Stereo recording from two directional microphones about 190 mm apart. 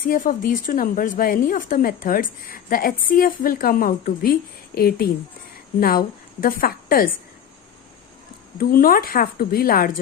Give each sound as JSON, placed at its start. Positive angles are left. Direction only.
{"t": 0.1, "sound": "a woman's voice", "side_deg": 45}
{"t": 8.5, "sound": "a woman's voice", "side_deg": 50}